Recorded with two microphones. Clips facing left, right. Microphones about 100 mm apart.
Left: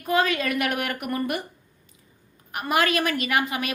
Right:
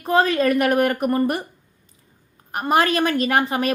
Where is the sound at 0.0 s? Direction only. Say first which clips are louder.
Right 5 dB; 35° right (ahead or behind).